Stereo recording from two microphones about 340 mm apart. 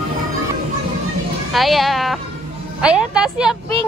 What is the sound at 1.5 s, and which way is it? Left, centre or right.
A woman's voice, centre.